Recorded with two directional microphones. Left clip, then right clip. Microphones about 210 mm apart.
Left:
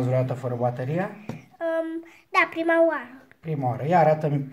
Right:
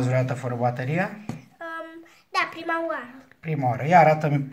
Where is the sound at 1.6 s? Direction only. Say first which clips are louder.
Left 9 dB; 35° left (ahead or behind).